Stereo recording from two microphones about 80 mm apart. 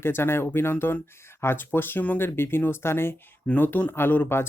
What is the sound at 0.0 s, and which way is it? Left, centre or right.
Speech, left.